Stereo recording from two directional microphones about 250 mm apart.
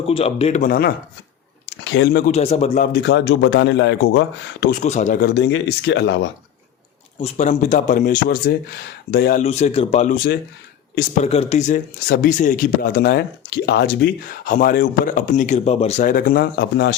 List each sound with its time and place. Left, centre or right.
0.0 s speech: left
2.3 s a man's voice: left
4.7 s speech: left
7.2 s speech: left